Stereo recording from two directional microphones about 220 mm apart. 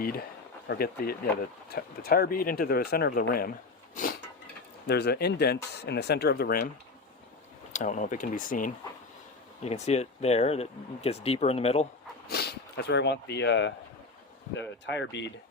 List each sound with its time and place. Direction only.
0.0 s speech: 45° left (ahead or behind)
3.9 s a sound: 40° left (ahead or behind)
4.9 s speech: 50° left (ahead or behind)
7.7 s speech: 35° left (ahead or behind)
12.3 s speech: 45° left (ahead or behind)
14.8 s speech: 50° left (ahead or behind)